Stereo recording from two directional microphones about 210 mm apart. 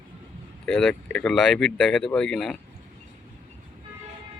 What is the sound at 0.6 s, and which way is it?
Speech, 5° left (ahead or behind).